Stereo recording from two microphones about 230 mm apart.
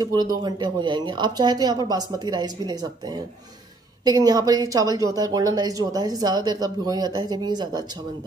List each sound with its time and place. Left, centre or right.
0.0 s a woman's voice: centre